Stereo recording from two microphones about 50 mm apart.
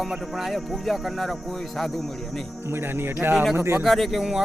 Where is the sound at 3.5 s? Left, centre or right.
Right.